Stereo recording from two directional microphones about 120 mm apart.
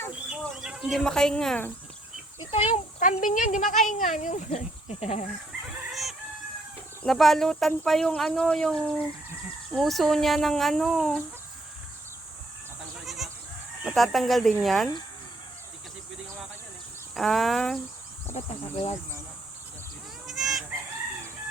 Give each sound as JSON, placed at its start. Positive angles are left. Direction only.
{"t": 0.3, "sound": "bird", "side_deg": -5}
{"t": 2.4, "sound": "speech", "side_deg": 55}
{"t": 3.0, "sound": "speech", "side_deg": 90}
{"t": 5.9, "sound": "chicken", "side_deg": 0}
{"t": 7.0, "sound": "speech", "side_deg": 5}
{"t": 13.1, "sound": "goat", "side_deg": 0}
{"t": 13.8, "sound": "speech", "side_deg": 0}
{"t": 17.2, "sound": "speech", "side_deg": 0}
{"t": 18.3, "sound": "speech", "side_deg": 55}
{"t": 20.2, "sound": "goat", "side_deg": 0}